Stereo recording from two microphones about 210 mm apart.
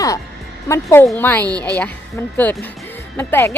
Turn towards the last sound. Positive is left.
turn(degrees=10)  # may be behind; listen again after turning